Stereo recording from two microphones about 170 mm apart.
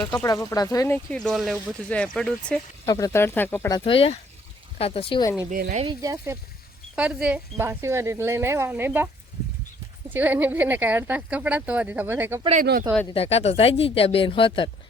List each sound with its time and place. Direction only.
0.3 s speech: 20° left (ahead or behind)
1.1 s speech: 5° left (ahead or behind)
1.9 s speech: 5° left (ahead or behind)
2.8 s speech: 20° left (ahead or behind)
3.7 s speech: 25° left (ahead or behind)
5.5 s speech: 55° right (ahead or behind)
5.8 s speech: 25° right (ahead or behind)
6.9 s speech: 5° right (ahead or behind)
10.1 s speech: 10° right (ahead or behind)
13.1 s speech: 35° left (ahead or behind)